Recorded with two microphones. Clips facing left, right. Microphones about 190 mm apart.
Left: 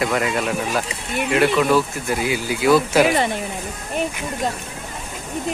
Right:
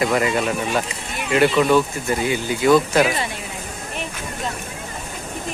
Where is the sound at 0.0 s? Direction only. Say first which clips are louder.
Right 2 dB; centre (ahead or behind).